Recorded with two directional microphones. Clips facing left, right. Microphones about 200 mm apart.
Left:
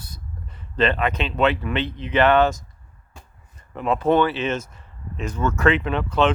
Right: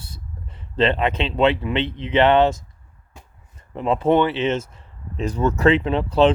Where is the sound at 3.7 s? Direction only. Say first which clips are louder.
Right 1 dB; 25° right (ahead or behind).